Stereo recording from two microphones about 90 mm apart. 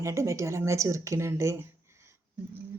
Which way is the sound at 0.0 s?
35° right (ahead or behind).